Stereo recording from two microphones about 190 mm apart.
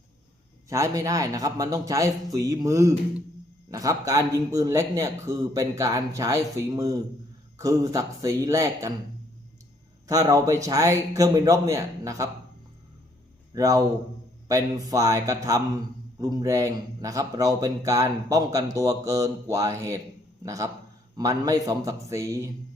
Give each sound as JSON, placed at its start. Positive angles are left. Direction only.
{"t": 0.7, "sound": "speech", "side_deg": -15}
{"t": 10.1, "sound": "speech", "side_deg": -20}
{"t": 13.5, "sound": "a man's voice", "side_deg": -20}